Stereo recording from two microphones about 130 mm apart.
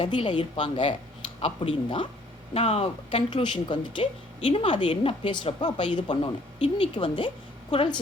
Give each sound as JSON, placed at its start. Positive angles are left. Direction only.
{"t": 0.0, "sound": "a woman's voice", "side_deg": 40}
{"t": 4.4, "sound": "a woman's voice", "side_deg": 50}